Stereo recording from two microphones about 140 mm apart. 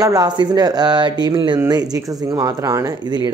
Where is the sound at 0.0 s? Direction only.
25° right (ahead or behind).